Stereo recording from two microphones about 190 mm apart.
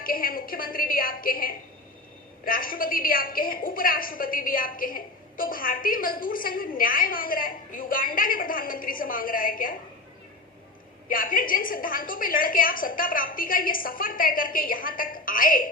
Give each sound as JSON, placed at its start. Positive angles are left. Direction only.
{"t": 0.0, "sound": "a woman's voice", "side_deg": 50}
{"t": 11.1, "sound": "a woman's voice", "side_deg": 45}